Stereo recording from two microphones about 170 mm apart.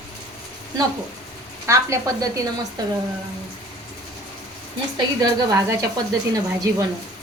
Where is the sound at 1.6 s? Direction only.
20° right (ahead or behind).